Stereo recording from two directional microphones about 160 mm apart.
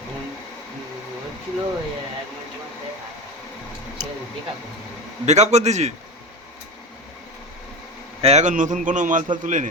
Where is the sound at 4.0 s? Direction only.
50° right (ahead or behind).